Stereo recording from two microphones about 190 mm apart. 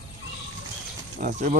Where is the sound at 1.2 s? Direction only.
45° right (ahead or behind).